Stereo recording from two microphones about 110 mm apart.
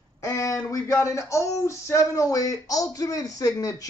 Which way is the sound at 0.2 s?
30° left (ahead or behind).